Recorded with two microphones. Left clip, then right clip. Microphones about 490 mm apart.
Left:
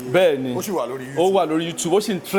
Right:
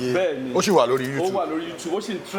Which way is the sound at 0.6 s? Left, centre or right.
Right.